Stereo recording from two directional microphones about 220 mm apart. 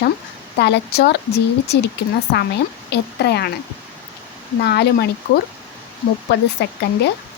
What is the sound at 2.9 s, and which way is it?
Speech, 50° left (ahead or behind).